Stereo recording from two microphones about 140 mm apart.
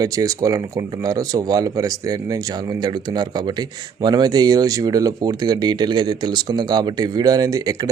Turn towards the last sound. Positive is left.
turn(degrees=-25)  # may be behind; listen again after turning